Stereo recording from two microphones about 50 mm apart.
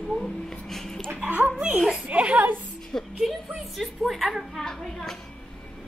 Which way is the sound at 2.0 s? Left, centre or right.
Right.